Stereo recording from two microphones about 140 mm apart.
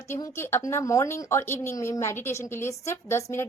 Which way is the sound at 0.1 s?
15° left (ahead or behind).